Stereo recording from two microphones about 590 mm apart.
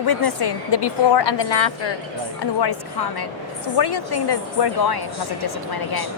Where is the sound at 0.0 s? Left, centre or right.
Left.